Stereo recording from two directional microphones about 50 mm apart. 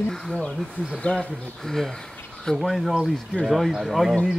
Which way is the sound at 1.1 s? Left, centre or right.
Centre.